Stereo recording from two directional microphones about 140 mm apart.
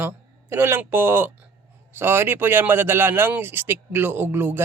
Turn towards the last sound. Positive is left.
turn(degrees=-15)  # may be behind; listen again after turning